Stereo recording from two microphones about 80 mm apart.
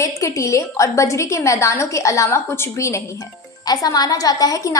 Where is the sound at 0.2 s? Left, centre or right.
Left.